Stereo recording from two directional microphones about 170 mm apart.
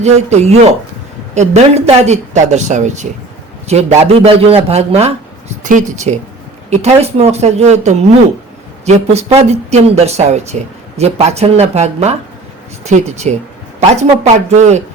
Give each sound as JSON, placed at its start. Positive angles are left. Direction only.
{"t": 0.0, "sound": "speech", "side_deg": -40}